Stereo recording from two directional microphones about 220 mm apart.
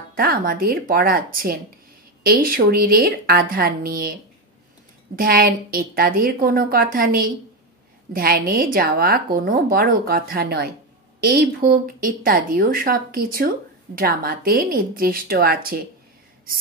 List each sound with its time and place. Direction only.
0.1 s a woman's voice: 40° right (ahead or behind)